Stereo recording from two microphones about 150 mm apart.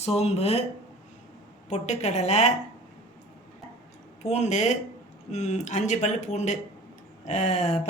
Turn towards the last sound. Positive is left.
turn(degrees=50)  # may be behind; listen again after turning